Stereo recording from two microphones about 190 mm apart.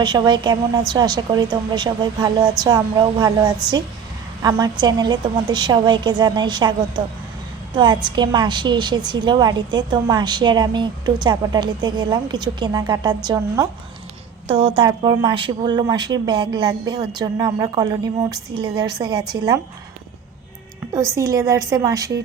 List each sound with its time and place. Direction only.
0.0 s a woman's voice: 20° right (ahead or behind)
20.8 s music: 5° right (ahead or behind)
21.2 s a woman's voice: 15° right (ahead or behind)